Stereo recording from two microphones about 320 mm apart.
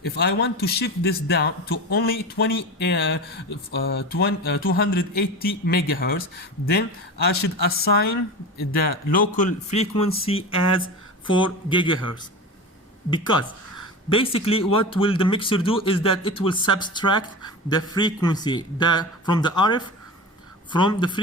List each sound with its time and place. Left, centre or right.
0.0 s a man's voice: left; by 11.9 s centre
13.1 s speech: centre